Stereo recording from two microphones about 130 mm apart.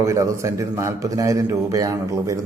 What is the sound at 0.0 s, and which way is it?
A man's voice, 25° right (ahead or behind).